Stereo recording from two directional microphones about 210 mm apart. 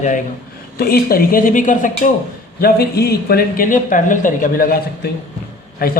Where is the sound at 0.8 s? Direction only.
45° left (ahead or behind).